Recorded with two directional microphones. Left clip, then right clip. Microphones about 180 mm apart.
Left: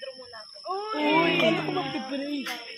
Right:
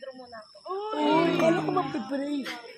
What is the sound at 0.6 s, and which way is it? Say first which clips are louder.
Speech: left 1 dB; 35° left (ahead or behind).